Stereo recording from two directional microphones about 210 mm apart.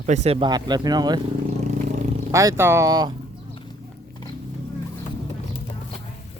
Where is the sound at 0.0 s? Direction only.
35° right (ahead or behind).